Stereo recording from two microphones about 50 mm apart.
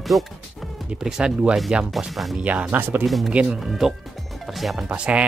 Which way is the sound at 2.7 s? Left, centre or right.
Right.